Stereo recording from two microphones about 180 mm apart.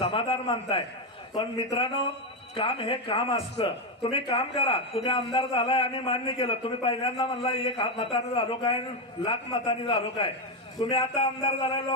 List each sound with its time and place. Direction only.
0.0 s a man's voice: 30° left (ahead or behind)